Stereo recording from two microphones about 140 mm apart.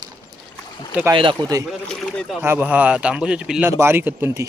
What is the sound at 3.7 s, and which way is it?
Speech, 20° right (ahead or behind).